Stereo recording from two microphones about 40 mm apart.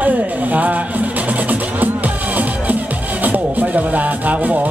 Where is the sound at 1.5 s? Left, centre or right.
Right.